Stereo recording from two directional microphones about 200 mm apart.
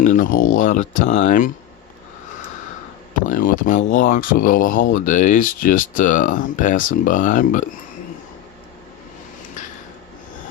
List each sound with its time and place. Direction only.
0.0 s speech: 40° left (ahead or behind)
3.2 s speech: 40° left (ahead or behind)
9.6 s a sound: 40° left (ahead or behind)